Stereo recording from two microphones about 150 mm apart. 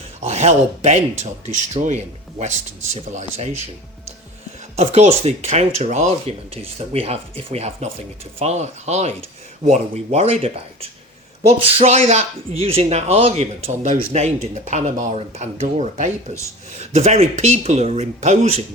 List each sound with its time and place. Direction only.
0.2 s speech: 45° right (ahead or behind)
3.1 s speech: 50° right (ahead or behind)
4.8 s speech: 45° right (ahead or behind)